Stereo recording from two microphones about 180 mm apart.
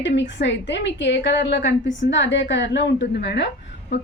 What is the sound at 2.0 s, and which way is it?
A woman's voice, 90° left.